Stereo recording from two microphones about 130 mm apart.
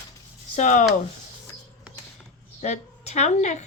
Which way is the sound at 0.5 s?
65° left (ahead or behind).